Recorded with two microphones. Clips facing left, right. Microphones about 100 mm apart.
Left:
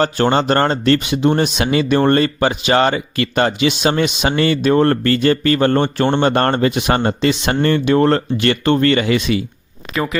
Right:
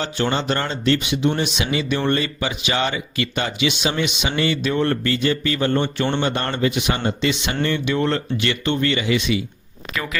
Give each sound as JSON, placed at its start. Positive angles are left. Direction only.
{"t": 0.0, "sound": "speech", "side_deg": 50}
{"t": 9.9, "sound": "speech", "side_deg": 30}